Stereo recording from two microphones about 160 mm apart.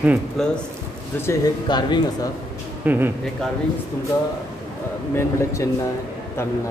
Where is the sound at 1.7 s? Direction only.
30° left (ahead or behind).